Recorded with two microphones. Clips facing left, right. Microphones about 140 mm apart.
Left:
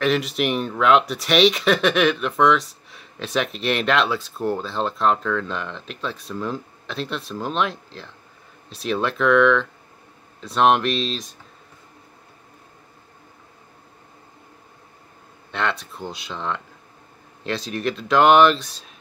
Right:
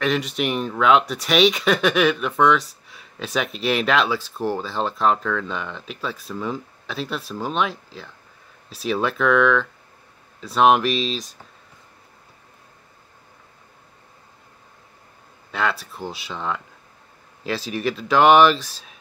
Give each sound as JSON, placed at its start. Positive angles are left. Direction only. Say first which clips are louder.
{"t": 0.0, "sound": "speech", "louder": "left 2 dB", "side_deg": 0}
{"t": 15.5, "sound": "speech", "louder": "right 1 dB", "side_deg": -5}